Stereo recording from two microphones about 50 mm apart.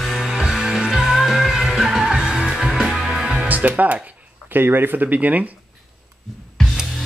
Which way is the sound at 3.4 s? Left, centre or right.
Right.